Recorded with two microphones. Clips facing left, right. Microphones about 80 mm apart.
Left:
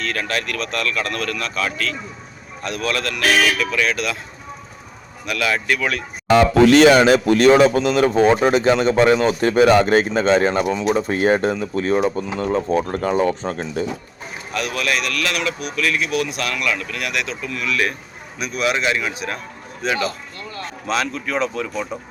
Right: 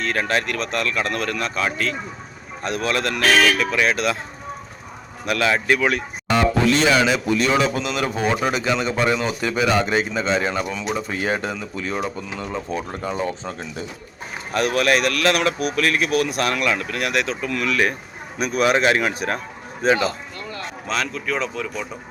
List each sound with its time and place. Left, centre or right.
0.0 s a man's voice: right
3.2 s speech: centre
3.6 s speech: right
5.2 s a man's voice: right
6.3 s speech: left
6.9 s speech: left
10.6 s speech: left
11.3 s speech: left
12.4 s speech: left
14.5 s a man's voice: right
19.8 s speech: right
20.8 s speech: centre